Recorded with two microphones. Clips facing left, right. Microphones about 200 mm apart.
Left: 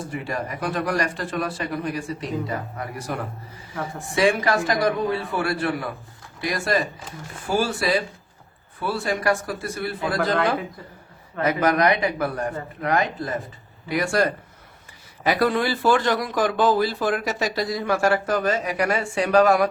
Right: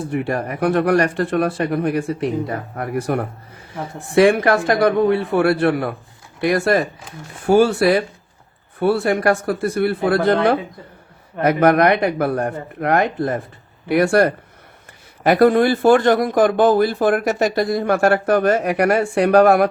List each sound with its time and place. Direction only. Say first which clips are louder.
0.1 s a man's voice: right 8 dB; 60° right (ahead or behind)
11.4 s a man's voice: right 6 dB; 60° right (ahead or behind)